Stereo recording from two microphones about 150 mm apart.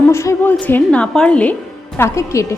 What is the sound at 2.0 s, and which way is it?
Speech, 20° left (ahead or behind).